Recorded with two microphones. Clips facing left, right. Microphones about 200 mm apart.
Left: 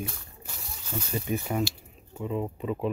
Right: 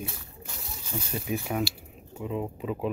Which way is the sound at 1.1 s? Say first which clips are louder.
Left 1 dB; centre (ahead or behind).